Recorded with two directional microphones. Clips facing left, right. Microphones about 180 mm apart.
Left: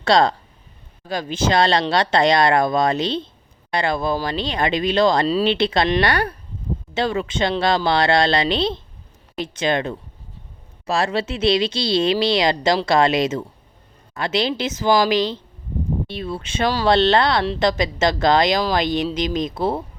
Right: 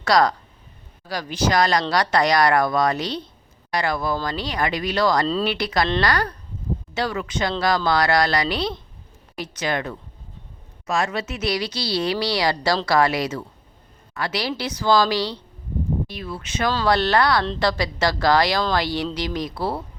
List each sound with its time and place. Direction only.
0.0 s speech: 25° left (ahead or behind)